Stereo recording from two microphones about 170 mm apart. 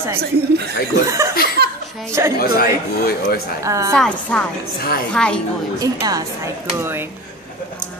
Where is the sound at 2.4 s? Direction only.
65° left (ahead or behind).